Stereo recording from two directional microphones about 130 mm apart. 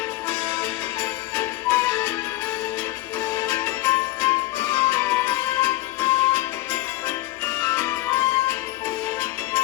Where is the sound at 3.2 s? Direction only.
20° left (ahead or behind).